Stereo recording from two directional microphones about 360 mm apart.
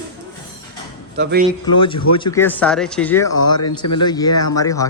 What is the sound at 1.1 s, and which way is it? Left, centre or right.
Speech, right.